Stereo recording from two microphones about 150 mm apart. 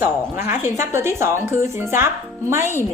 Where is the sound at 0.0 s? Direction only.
15° right (ahead or behind).